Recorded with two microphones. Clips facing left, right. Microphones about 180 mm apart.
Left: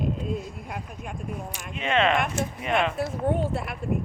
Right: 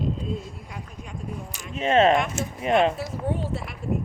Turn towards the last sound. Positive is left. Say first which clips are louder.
# left 3 dB
turn(degrees=55)  # may be behind; listen again after turning